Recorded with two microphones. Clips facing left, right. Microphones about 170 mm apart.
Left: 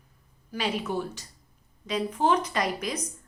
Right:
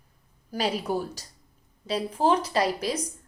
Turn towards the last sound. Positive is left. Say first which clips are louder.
# right 3 dB
turn(degrees=-30)  # may be behind; listen again after turning